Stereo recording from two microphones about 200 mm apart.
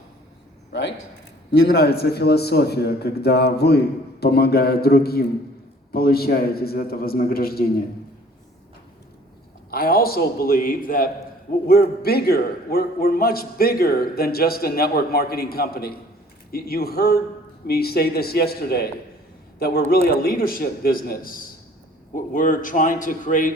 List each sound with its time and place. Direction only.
0.7 s a man's voice: 60° left (ahead or behind)
9.6 s a man's voice: 50° left (ahead or behind)